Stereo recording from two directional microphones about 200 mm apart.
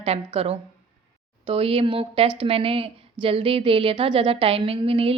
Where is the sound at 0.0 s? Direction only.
30° right (ahead or behind).